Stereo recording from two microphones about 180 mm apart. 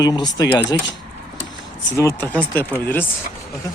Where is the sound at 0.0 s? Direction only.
20° left (ahead or behind).